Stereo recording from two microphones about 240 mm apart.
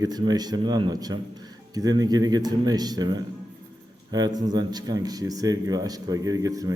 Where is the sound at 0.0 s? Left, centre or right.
Centre.